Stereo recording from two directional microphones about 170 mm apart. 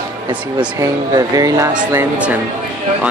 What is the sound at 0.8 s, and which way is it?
Speech, 20° right (ahead or behind).